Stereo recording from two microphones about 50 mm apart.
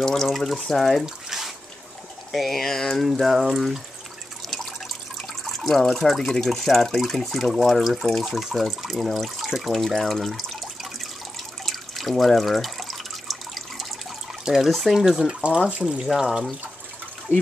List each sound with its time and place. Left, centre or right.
0.0 s speech: centre
5.4 s speech: centre
11.6 s drip: centre
14.4 s speech: centre
14.7 s speech: centre
15.0 s speech: centre
17.3 s speech: left